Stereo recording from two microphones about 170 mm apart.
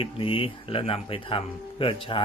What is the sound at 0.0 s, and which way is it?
Speech, 30° left (ahead or behind).